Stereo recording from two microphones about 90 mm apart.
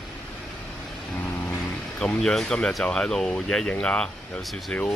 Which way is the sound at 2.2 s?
5° left (ahead or behind).